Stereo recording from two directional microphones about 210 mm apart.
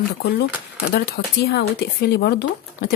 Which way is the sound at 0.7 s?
45° left (ahead or behind).